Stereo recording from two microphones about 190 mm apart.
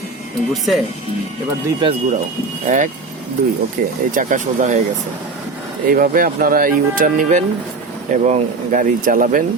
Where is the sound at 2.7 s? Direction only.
40° right (ahead or behind).